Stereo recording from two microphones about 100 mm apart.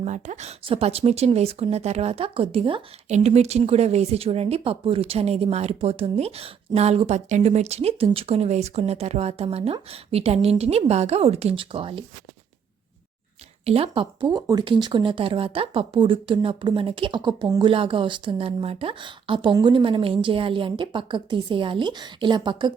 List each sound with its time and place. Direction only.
0.4 s speech: 75° right (ahead or behind)
3.2 s speech: 90° right; by 12.0 s 65° right (ahead or behind)
13.7 s a woman's voice: 75° right (ahead or behind); by 22.7 s 50° right (ahead or behind)